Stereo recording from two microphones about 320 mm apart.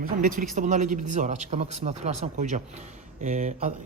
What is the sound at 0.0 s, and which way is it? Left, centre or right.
Speech, right.